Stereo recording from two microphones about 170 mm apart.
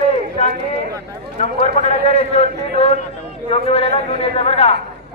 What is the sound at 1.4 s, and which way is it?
A man's voice, 40° left (ahead or behind).